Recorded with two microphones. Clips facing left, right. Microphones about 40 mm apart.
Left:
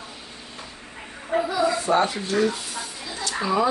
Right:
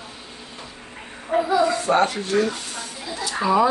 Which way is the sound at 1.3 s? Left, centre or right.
Centre.